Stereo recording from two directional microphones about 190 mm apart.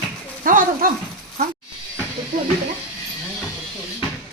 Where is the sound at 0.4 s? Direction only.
45° right (ahead or behind).